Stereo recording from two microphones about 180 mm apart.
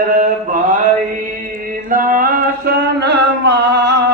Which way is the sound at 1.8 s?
50° right (ahead or behind).